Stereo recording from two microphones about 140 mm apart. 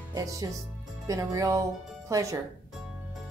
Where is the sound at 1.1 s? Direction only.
25° right (ahead or behind).